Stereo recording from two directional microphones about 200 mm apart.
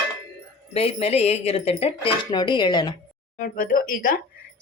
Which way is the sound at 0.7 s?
30° left (ahead or behind).